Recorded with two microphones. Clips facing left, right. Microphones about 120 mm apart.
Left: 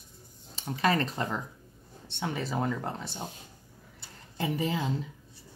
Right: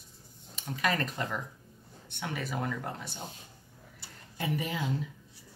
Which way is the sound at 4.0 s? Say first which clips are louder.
Left 4 dB; 25° left (ahead or behind).